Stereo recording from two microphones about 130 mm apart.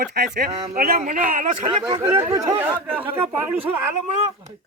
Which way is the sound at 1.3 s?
90° right.